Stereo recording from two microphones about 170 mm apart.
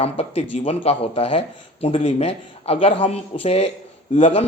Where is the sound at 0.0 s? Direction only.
35° left (ahead or behind).